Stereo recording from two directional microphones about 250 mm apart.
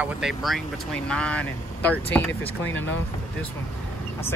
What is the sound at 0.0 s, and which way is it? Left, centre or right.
Speech, centre.